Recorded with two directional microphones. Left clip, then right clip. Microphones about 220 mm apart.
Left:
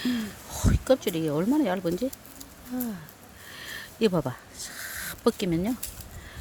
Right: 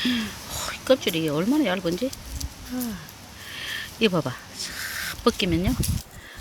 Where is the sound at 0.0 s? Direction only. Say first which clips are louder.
Right 5 dB; 15° left (ahead or behind).